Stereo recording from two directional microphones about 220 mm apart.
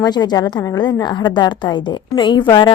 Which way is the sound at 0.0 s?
20° left (ahead or behind).